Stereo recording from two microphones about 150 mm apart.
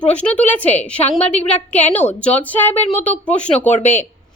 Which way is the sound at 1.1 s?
40° left (ahead or behind).